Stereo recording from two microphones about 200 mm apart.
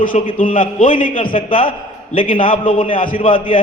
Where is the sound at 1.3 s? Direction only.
25° left (ahead or behind).